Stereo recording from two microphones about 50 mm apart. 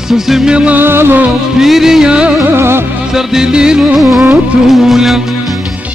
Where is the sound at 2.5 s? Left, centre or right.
Right.